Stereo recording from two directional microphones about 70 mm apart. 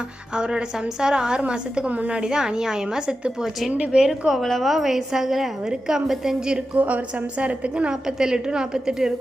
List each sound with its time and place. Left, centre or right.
0.3 s a woman's voice: centre
4.3 s a woman's voice: centre